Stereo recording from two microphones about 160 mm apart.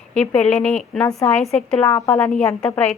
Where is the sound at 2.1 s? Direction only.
5° left (ahead or behind).